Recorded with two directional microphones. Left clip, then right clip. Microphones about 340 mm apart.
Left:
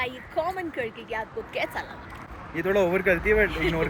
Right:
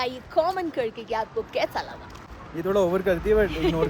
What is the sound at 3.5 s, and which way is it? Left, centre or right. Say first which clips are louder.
Speech: right 2 dB; right.